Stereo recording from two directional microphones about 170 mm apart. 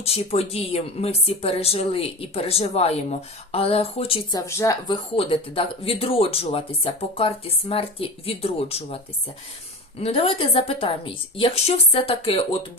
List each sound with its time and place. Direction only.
0.0 s speech: 35° left (ahead or behind); by 4.9 s 20° left (ahead or behind)
5.1 s speech: 35° left (ahead or behind)
10.0 s speech: 35° left (ahead or behind)